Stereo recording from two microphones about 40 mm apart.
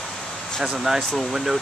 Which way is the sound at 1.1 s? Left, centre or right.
Centre.